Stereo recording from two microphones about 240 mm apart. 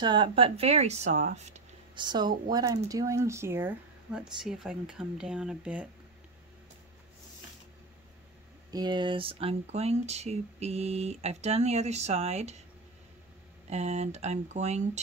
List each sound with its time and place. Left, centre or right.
0.0 s speech: centre
8.7 s speech: centre
13.7 s speech: right